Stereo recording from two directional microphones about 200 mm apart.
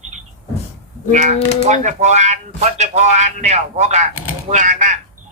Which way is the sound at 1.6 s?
35° right (ahead or behind).